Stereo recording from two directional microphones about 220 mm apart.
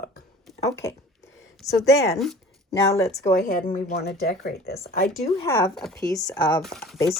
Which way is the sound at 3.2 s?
35° left (ahead or behind).